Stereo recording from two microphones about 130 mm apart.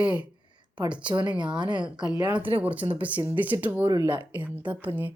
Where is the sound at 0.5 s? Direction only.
35° right (ahead or behind).